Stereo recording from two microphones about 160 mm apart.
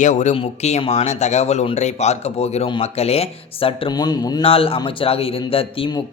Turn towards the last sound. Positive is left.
turn(degrees=35)  # may be behind; listen again after turning